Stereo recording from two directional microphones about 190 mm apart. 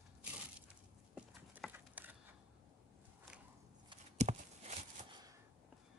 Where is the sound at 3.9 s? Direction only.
35° right (ahead or behind).